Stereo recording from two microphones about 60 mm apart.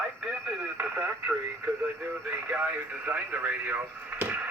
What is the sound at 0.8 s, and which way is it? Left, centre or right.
Radio, right.